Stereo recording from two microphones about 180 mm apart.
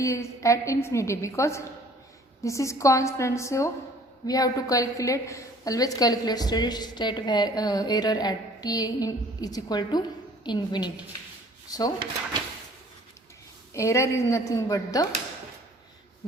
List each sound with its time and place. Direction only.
0.0 s a woman's voice: 15° left (ahead or behind)
13.7 s a woman's voice: 15° left (ahead or behind)